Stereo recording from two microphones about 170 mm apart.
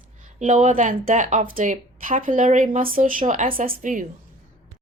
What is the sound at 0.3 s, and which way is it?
Speech, 45° right (ahead or behind).